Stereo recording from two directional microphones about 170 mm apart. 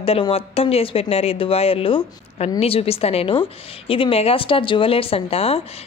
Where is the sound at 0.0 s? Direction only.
35° left (ahead or behind).